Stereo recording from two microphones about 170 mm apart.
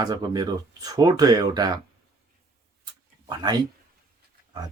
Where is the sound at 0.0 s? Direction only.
25° right (ahead or behind).